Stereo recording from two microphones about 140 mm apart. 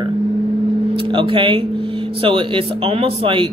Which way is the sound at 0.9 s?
35° right (ahead or behind).